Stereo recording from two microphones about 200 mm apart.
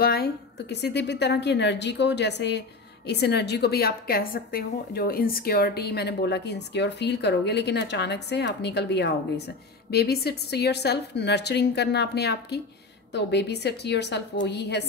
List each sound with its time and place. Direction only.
0.0 s a woman's voice: 50° left (ahead or behind)